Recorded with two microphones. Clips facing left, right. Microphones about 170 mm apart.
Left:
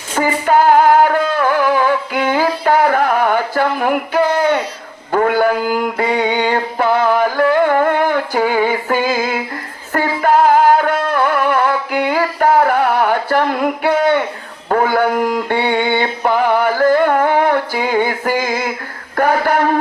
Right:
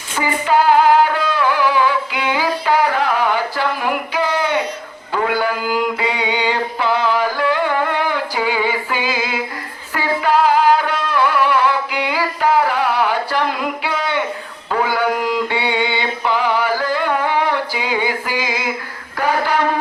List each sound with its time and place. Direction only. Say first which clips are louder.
0.2 s music: left 3 dB; 50° left (ahead or behind)
5.1 s mantra: left 5 dB; 50° left (ahead or behind)
9.9 s music: left 3 dB; 50° left (ahead or behind)
14.7 s a sound: left 4 dB; 50° left (ahead or behind)
19.1 s speech: left 4 dB; 50° left (ahead or behind)